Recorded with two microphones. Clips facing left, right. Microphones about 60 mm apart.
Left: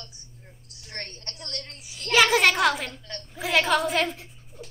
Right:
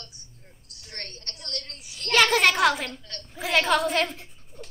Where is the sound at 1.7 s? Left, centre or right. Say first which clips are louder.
Left 1 dB; centre.